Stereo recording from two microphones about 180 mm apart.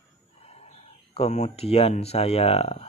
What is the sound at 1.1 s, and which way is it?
Speech, 35° left (ahead or behind).